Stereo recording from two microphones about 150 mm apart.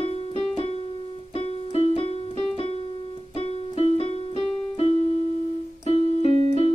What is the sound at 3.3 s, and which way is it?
Keyboard, 40° left (ahead or behind).